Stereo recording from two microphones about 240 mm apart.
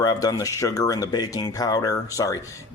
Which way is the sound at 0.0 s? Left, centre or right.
Centre.